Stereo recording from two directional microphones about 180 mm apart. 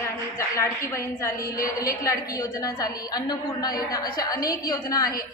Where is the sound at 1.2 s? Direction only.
15° left (ahead or behind).